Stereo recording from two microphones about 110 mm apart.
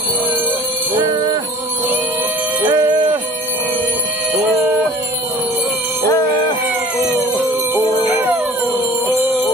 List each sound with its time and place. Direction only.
0.9 s music: 45° right (ahead or behind)
2.6 s jingle bell: 40° right (ahead or behind)
8.1 s jingle bell: 15° right (ahead or behind)